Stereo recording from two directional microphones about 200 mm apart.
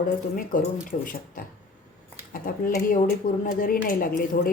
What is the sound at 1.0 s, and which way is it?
A woman's voice, 45° left (ahead or behind).